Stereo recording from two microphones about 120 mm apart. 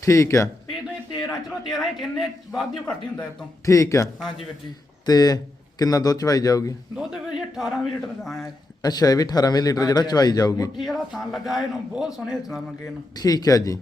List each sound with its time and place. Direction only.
0.0 s a man's voice: 25° left (ahead or behind)
1.5 s a man's voice: centre (ahead or behind)
3.7 s a man's voice: 25° left (ahead or behind)
6.9 s a man's voice: 5° right (ahead or behind)
8.8 s speech: 30° left (ahead or behind)
10.8 s a man's voice: centre (ahead or behind)
13.1 s speech: 30° left (ahead or behind)